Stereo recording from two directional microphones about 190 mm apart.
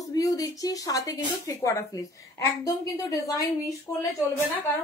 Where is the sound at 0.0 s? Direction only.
20° left (ahead or behind).